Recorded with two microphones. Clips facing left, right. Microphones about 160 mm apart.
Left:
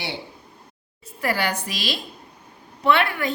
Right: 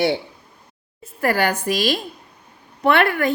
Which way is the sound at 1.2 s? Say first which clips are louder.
Right 5 dB; 50° right (ahead or behind).